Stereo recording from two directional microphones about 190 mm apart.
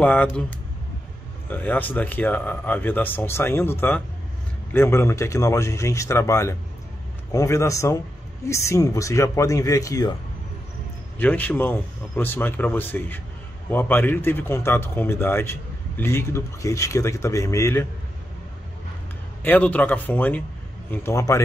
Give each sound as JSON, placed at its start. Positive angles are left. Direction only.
{"t": 0.0, "sound": "speech", "side_deg": 10}
{"t": 11.1, "sound": "speech", "side_deg": 10}
{"t": 19.4, "sound": "speech", "side_deg": 10}